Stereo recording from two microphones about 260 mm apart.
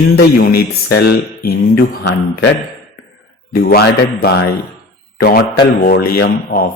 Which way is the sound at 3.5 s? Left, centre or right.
Left.